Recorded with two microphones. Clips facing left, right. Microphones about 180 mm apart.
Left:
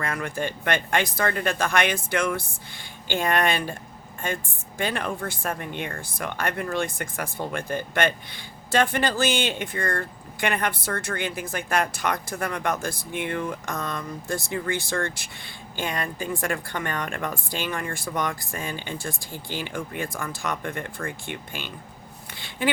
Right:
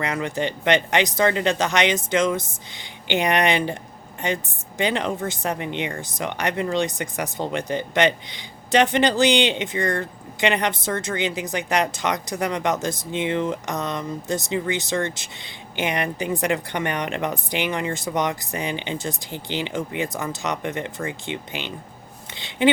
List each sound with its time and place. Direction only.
0.0 s speech: 20° right (ahead or behind)